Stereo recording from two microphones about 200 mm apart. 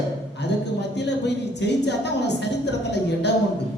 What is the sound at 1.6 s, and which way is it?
Speech, 60° left (ahead or behind).